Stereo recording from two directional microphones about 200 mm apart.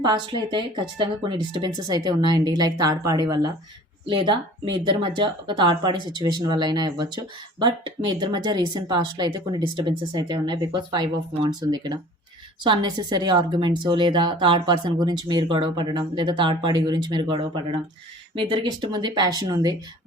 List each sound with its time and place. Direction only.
0.0 s speech: 20° right (ahead or behind)